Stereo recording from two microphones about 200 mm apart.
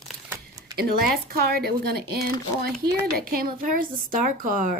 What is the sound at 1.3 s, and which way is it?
Speech, 50° right (ahead or behind).